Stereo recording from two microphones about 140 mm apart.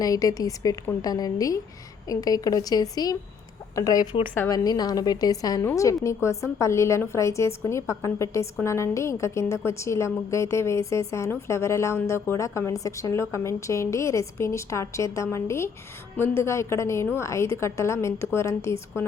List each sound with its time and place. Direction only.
0.0 s a woman's voice: 25° left (ahead or behind)